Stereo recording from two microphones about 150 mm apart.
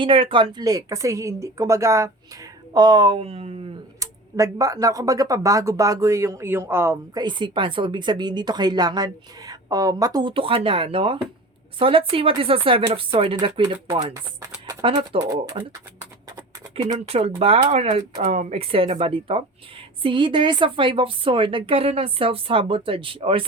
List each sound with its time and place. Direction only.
0.0 s a woman's voice: 35° right (ahead or behind)
4.0 s a woman's voice: 20° right (ahead or behind)
14.8 s a woman's voice: 35° right (ahead or behind)
17.1 s a woman's voice: 40° right (ahead or behind)